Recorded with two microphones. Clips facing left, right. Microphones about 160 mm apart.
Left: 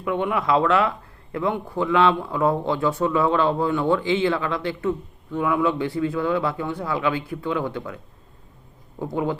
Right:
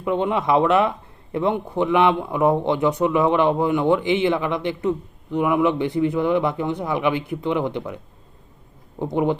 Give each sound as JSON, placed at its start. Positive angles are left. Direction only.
{"t": 0.0, "sound": "speech", "side_deg": -25}